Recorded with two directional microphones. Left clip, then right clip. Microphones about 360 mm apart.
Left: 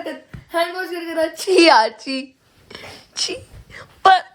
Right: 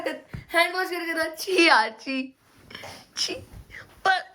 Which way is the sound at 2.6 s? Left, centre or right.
Centre.